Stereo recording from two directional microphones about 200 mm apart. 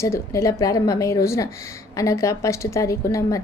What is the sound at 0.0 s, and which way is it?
A woman's voice, 15° left (ahead or behind).